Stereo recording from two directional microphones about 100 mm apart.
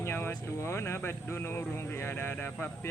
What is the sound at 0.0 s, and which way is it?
Speech, 20° left (ahead or behind).